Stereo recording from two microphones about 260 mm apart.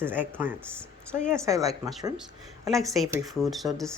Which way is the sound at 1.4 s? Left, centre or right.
Centre.